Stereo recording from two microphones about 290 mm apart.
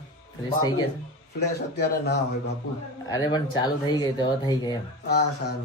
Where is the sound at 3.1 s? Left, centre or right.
Centre.